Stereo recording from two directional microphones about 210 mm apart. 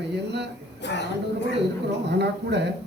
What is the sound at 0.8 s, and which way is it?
Speech, 55° left (ahead or behind).